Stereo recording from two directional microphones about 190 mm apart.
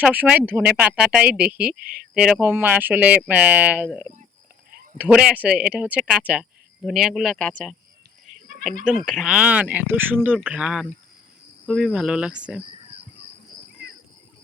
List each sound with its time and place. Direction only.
0.0 s speech: 5° right (ahead or behind)
1.7 s speech: 50° right (ahead or behind)
2.1 s speech: 5° right (ahead or behind)
9.0 s speech: centre (ahead or behind)